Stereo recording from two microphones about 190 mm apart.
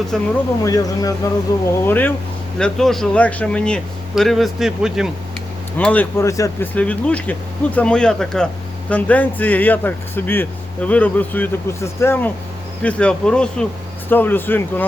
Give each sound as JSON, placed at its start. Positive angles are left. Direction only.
{"t": 0.1, "sound": "speech", "side_deg": 0}
{"t": 0.6, "sound": "speech", "side_deg": 20}
{"t": 5.7, "sound": "speech", "side_deg": 10}